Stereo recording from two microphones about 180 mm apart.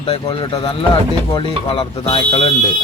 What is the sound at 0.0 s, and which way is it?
Speech, 30° left (ahead or behind).